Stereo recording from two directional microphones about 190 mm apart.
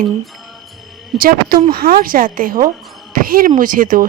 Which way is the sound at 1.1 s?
50° right (ahead or behind).